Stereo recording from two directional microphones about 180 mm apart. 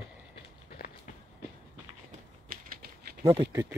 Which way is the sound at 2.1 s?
50° right (ahead or behind).